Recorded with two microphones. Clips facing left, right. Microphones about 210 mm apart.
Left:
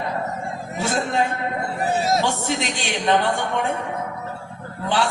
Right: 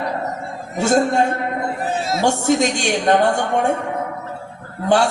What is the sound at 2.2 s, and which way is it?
A woman's voice, 45° right (ahead or behind).